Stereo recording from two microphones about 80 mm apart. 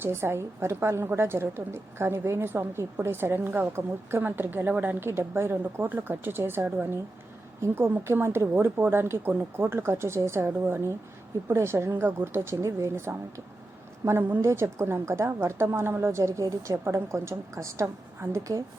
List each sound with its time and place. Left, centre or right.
0.0 s a woman's voice: right